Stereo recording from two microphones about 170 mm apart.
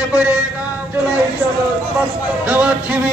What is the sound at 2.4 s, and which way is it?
Speech, 10° right (ahead or behind).